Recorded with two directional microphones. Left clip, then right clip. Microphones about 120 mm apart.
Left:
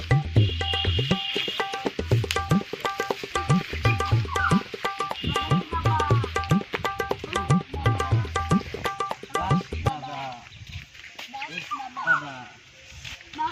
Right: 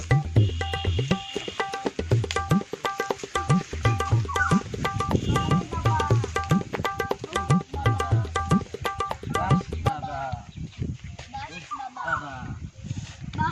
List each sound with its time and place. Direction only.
0.1 s music: centre (ahead or behind)
6.0 s tabla: centre (ahead or behind)
6.8 s music: centre (ahead or behind)
7.3 s tabla: centre (ahead or behind)